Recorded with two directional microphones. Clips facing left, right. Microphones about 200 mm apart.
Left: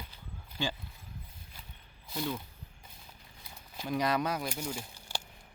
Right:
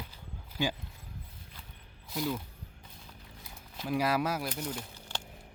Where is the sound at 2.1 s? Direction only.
Centre (ahead or behind).